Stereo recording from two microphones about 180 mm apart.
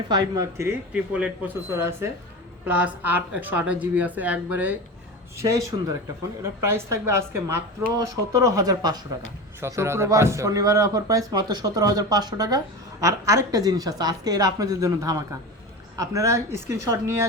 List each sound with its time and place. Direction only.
0.1 s a man's voice: 20° right (ahead or behind)
0.9 s speech: 5° right (ahead or behind)
6.4 s a man's voice: 15° right (ahead or behind)